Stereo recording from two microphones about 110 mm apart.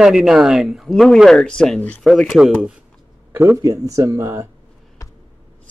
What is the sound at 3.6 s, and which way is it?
Speech, 30° right (ahead or behind).